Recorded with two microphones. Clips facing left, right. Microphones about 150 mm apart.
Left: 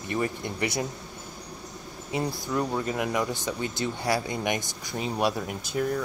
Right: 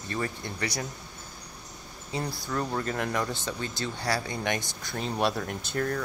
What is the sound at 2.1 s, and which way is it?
Speech, 15° left (ahead or behind).